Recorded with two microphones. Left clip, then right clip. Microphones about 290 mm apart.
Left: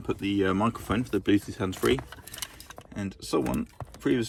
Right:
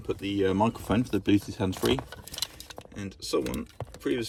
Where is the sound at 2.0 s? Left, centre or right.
Centre.